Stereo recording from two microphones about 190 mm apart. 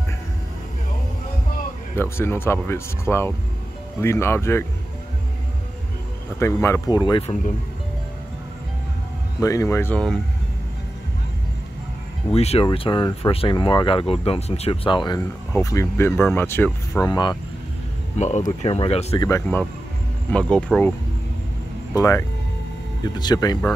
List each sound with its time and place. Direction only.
2.0 s speech: 10° left (ahead or behind)
6.4 s speech: 15° left (ahead or behind)
9.4 s speech: 15° left (ahead or behind)
12.4 s speech: 35° left (ahead or behind); by 17.0 s 10° left (ahead or behind)
17.0 s speech: 20° left (ahead or behind)
18.2 s speech: 35° left (ahead or behind)
19.1 s speech: 15° left (ahead or behind)
21.9 s speech: 15° left (ahead or behind)